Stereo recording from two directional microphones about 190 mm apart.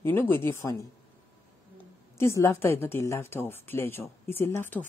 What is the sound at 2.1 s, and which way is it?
Speech, 15° left (ahead or behind).